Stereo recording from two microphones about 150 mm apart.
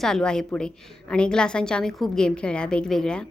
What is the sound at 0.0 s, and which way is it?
A woman's voice, 5° left (ahead or behind).